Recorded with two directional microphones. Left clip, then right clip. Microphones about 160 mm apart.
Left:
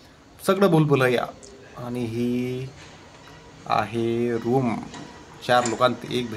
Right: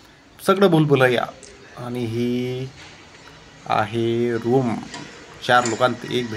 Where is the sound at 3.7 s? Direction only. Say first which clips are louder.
Right 3 dB; 10° right (ahead or behind).